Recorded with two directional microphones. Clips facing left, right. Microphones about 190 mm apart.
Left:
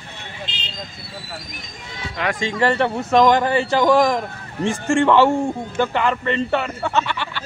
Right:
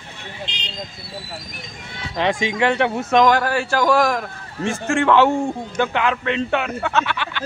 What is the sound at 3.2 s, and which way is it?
A man's voice, 20° left (ahead or behind).